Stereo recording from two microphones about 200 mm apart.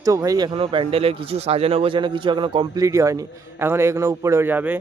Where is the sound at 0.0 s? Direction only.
15° right (ahead or behind).